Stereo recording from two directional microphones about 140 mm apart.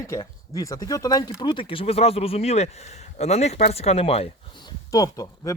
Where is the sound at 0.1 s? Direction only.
25° left (ahead or behind); by 4.3 s 45° left (ahead or behind).